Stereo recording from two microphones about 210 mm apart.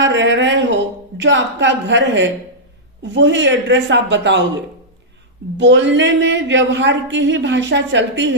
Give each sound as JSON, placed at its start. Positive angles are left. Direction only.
{"t": 0.0, "sound": "a woman's voice", "side_deg": -60}
{"t": 5.5, "sound": "a woman's voice", "side_deg": -60}